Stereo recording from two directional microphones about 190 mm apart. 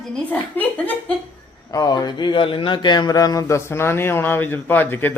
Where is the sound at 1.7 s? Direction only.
20° left (ahead or behind).